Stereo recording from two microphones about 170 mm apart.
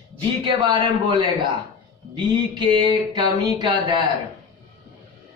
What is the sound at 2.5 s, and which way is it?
A man's voice, 25° right (ahead or behind).